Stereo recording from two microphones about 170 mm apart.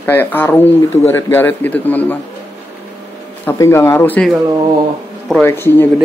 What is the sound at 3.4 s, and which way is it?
Speech, 15° left (ahead or behind).